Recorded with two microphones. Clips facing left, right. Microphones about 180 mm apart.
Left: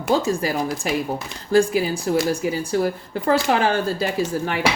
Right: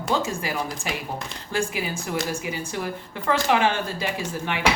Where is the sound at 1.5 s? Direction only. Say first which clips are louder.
Left 10 dB; 35° left (ahead or behind).